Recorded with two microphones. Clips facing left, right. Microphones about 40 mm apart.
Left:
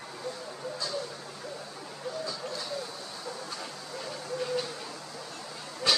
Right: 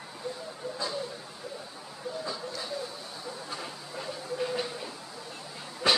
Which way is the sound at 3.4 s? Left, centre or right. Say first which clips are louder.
Even; centre.